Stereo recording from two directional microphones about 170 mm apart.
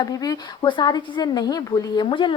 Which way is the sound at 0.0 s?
20° left (ahead or behind).